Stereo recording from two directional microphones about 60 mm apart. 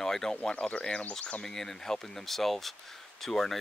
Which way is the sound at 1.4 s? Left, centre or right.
Centre.